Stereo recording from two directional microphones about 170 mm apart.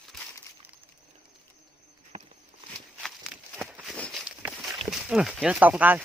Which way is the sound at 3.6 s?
Centre (ahead or behind).